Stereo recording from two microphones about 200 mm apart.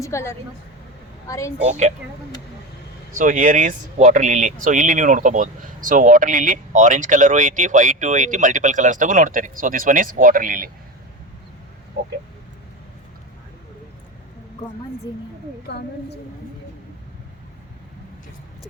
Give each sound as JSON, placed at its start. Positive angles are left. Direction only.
{"t": 0.0, "sound": "a woman's voice", "side_deg": 15}
{"t": 3.2, "sound": "speech", "side_deg": -40}
{"t": 12.0, "sound": "speech", "side_deg": -50}
{"t": 15.7, "sound": "a woman's voice", "side_deg": 55}